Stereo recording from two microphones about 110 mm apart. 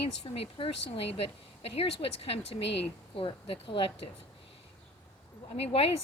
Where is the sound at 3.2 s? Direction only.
55° left (ahead or behind).